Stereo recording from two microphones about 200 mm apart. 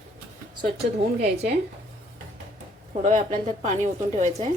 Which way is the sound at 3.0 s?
35° right (ahead or behind).